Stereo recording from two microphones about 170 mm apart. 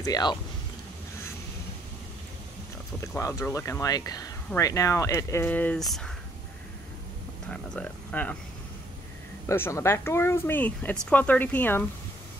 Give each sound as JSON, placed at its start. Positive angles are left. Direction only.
{"t": 0.0, "sound": "speech", "side_deg": 25}
{"t": 3.2, "sound": "speech", "side_deg": 20}
{"t": 7.4, "sound": "speech", "side_deg": 10}
{"t": 9.5, "sound": "speech", "side_deg": 15}